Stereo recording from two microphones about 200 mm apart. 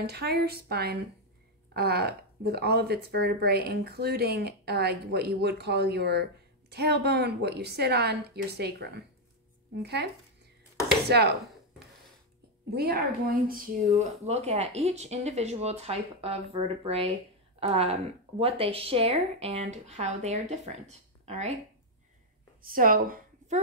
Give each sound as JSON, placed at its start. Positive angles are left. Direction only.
{"t": 0.0, "sound": "a woman's voice", "side_deg": -55}
{"t": 11.1, "sound": "speech", "side_deg": -55}
{"t": 12.7, "sound": "speech", "side_deg": -50}
{"t": 13.9, "sound": "speech", "side_deg": -35}
{"t": 22.6, "sound": "a woman's voice", "side_deg": -45}